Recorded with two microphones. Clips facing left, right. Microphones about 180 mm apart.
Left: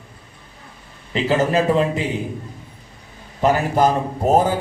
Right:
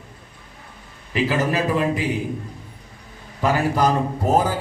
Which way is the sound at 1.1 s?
25° left (ahead or behind).